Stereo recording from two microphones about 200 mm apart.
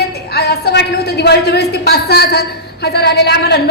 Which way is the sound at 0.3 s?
55° left (ahead or behind).